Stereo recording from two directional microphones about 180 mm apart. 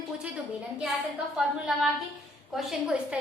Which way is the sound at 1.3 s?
5° right (ahead or behind).